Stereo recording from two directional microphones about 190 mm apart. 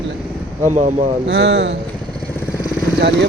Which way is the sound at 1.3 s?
65° right (ahead or behind).